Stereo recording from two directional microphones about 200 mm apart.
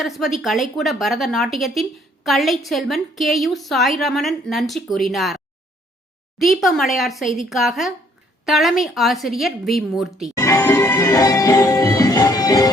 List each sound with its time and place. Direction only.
0.0 s a woman's voice: centre (ahead or behind)
6.4 s a woman's voice: centre (ahead or behind)
10.3 s music: 15° left (ahead or behind)